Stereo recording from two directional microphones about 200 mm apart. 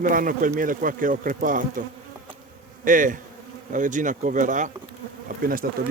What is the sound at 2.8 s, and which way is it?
Speech, 40° right (ahead or behind).